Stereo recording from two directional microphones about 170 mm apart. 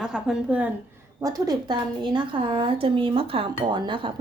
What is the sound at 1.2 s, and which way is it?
A woman's voice, 20° right (ahead or behind).